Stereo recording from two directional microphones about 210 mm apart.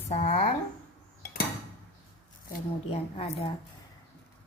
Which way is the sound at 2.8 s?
30° left (ahead or behind).